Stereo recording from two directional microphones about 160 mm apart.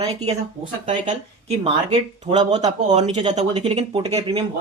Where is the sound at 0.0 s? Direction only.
40° right (ahead or behind).